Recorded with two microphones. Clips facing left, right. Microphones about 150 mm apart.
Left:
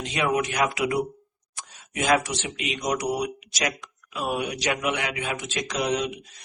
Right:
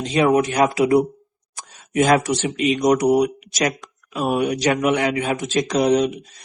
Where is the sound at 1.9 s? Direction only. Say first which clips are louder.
Right 7 dB; 50° right (ahead or behind).